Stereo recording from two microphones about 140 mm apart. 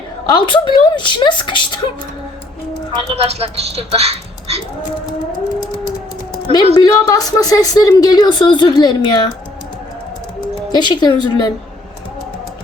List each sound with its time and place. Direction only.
0.3 s a woman's voice: 35° left (ahead or behind)
2.9 s a woman's voice: 40° right (ahead or behind)
6.7 s a woman's voice: 30° left (ahead or behind)
10.7 s a woman's voice: 30° left (ahead or behind)